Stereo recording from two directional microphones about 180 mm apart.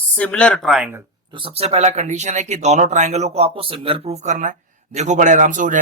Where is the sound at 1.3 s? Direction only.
30° right (ahead or behind).